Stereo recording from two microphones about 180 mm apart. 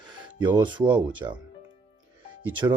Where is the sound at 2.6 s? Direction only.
20° right (ahead or behind).